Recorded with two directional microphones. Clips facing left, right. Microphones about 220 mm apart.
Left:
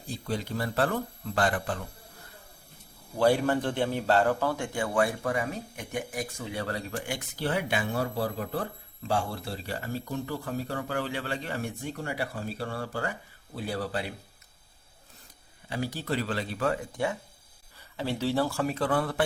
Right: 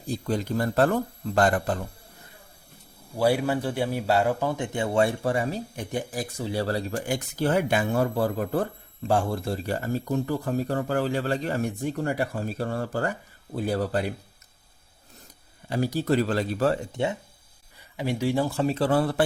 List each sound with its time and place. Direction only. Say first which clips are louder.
0.1 s a man's voice: right 6 dB; 45° right (ahead or behind)
3.2 s a man's voice: right 1 dB; 10° right (ahead or behind); by 14.1 s 45° right (ahead or behind)
15.7 s a man's voice: right 7 dB; 40° right (ahead or behind)